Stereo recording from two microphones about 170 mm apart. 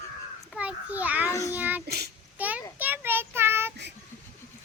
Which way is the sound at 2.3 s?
10° right (ahead or behind).